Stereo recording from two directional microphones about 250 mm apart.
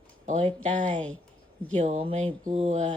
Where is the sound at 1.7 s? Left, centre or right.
Right.